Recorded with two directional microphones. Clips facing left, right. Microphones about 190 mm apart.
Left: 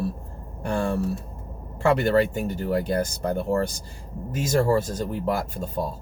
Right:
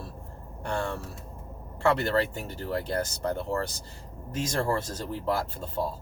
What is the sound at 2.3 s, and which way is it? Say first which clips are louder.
Speech: left 7 dB; 15° left (ahead or behind).